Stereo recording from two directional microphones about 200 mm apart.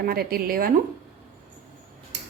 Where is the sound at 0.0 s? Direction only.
50° right (ahead or behind).